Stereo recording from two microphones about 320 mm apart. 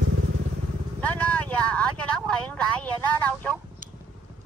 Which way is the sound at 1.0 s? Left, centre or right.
Centre.